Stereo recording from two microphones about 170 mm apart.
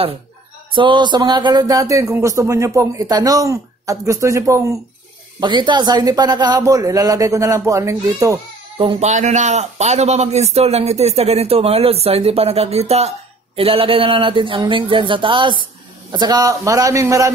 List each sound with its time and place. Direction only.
0.7 s speech: 25° right (ahead or behind)
9.0 s a man's voice: 45° right (ahead or behind); by 17.3 s 20° right (ahead or behind)